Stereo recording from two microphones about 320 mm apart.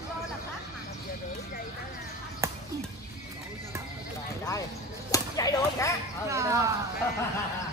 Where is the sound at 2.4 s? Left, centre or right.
Centre.